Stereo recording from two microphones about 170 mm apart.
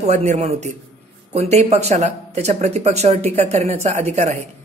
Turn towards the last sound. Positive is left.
turn(degrees=-40)  # may be behind; listen again after turning